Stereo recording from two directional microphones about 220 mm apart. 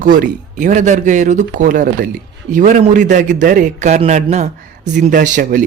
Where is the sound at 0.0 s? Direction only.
40° right (ahead or behind).